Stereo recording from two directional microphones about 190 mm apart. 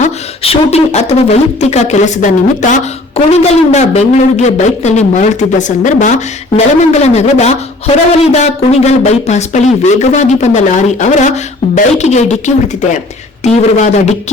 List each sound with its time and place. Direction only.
0.0 s speech: 30° left (ahead or behind)